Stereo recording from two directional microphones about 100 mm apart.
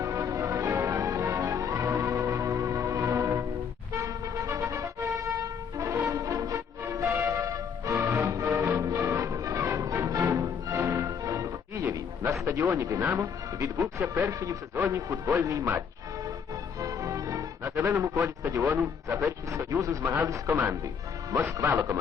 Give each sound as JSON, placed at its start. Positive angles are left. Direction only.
{"t": 0.0, "sound": "music", "side_deg": -35}
{"t": 12.3, "sound": "a man's voice", "side_deg": -30}
{"t": 16.8, "sound": "music", "side_deg": -35}
{"t": 17.7, "sound": "a man's voice", "side_deg": -25}